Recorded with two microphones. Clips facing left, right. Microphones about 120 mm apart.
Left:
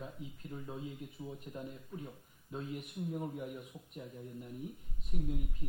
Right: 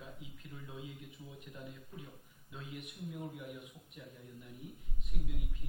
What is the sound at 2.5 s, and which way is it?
Speech, 40° left (ahead or behind).